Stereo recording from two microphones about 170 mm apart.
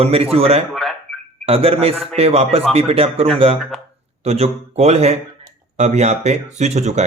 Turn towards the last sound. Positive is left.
turn(degrees=-40)  # may be behind; listen again after turning